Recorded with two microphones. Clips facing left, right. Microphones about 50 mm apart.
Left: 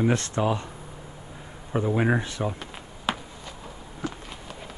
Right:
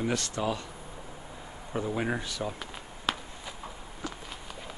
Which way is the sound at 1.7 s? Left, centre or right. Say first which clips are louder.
Left 7 dB; left.